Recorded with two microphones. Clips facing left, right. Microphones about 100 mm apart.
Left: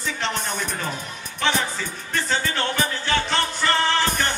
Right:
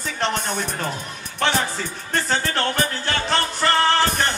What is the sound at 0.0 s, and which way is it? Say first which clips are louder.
Speech: right 3 dB; 50° right (ahead or behind).